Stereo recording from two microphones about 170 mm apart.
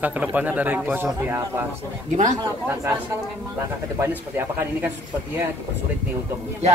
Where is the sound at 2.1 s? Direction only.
45° right (ahead or behind).